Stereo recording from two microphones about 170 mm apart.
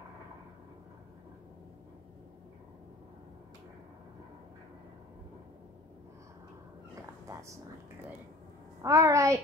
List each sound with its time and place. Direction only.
8.8 s a child's voice: 20° right (ahead or behind)